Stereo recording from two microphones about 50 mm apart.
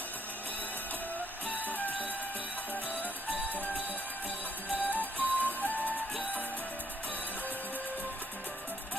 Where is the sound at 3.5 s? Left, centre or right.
Left.